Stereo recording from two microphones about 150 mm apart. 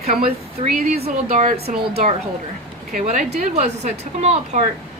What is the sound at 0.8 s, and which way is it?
Speech, 90° right.